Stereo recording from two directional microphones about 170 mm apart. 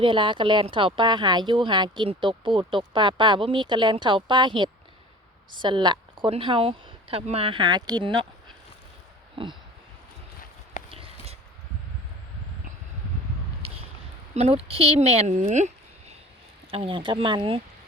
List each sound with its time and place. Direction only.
0.0 s a woman's voice: 30° right (ahead or behind)
9.3 s a sound: 30° right (ahead or behind)
10.9 s a sound: 35° right (ahead or behind)
13.6 s squish: 35° right (ahead or behind)
14.3 s speech: 35° right (ahead or behind)
16.7 s speech: 30° right (ahead or behind)